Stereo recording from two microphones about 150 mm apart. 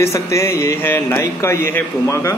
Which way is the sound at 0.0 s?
20° left (ahead or behind).